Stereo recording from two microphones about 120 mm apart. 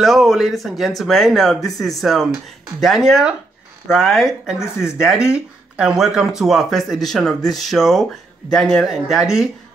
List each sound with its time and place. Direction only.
0.0 s speech: centre (ahead or behind)